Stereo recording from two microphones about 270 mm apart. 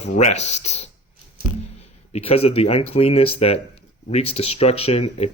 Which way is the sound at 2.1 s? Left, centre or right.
Left.